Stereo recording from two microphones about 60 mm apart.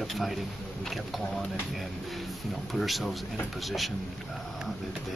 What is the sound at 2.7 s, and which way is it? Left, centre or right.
Speech, centre.